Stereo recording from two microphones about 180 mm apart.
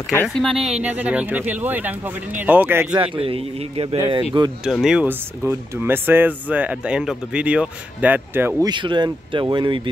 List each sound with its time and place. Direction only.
0.3 s speech: centre (ahead or behind)
3.2 s speech: 30° right (ahead or behind)
4.3 s speech: 10° right (ahead or behind)
4.6 s speech: centre (ahead or behind)
8.6 s speech: 25° right (ahead or behind)